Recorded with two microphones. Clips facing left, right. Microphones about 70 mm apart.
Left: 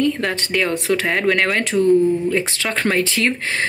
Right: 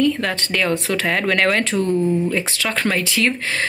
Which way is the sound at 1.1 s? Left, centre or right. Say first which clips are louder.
Right 2 dB; centre.